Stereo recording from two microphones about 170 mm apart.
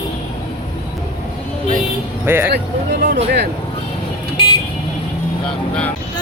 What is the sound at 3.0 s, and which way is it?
Speech, 50° right (ahead or behind).